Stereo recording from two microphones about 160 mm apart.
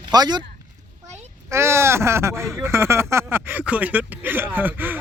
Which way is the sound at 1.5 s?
15° right (ahead or behind).